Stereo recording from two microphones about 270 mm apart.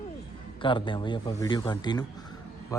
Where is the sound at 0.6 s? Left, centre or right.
Centre.